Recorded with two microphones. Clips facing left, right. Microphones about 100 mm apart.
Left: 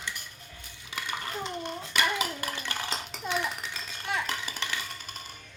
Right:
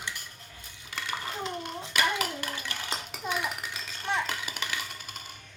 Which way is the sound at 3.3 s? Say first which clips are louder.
Left 1 dB; 10° right (ahead or behind).